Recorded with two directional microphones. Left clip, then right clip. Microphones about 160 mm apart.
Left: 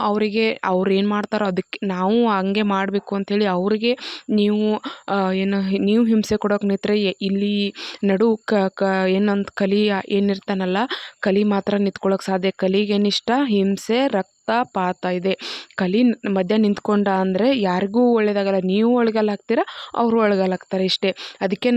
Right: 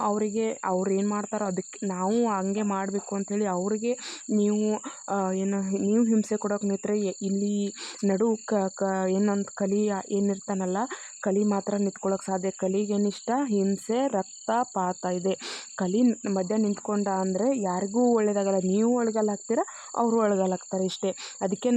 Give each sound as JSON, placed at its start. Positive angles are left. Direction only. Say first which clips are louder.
{"t": 0.0, "sound": "speech", "louder": "left 7 dB", "side_deg": 35}
{"t": 12.9, "sound": "speech", "louder": "left 8 dB", "side_deg": 30}
{"t": 17.2, "sound": "speech", "louder": "left 7 dB", "side_deg": 30}